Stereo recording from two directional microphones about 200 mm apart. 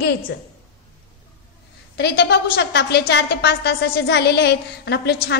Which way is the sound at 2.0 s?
55° left (ahead or behind).